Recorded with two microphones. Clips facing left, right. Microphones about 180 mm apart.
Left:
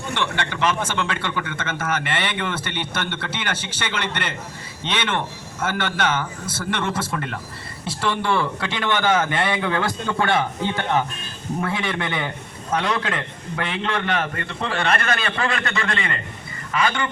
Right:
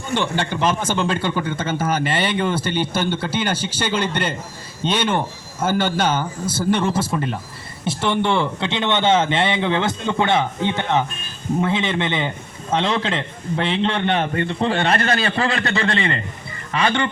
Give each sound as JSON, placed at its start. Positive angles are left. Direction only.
{"t": 0.1, "sound": "a man's voice", "side_deg": -30}